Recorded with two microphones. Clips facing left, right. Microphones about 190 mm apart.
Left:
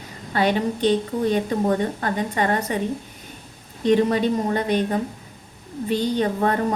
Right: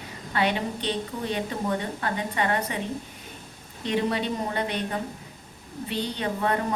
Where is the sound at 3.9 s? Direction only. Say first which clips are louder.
Left 8 dB; 45° left (ahead or behind).